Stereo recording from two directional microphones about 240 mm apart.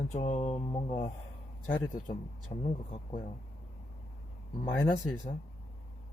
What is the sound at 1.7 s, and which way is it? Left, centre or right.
Speech, centre.